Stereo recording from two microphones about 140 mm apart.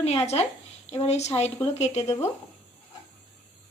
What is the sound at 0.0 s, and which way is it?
Speech, 50° left (ahead or behind).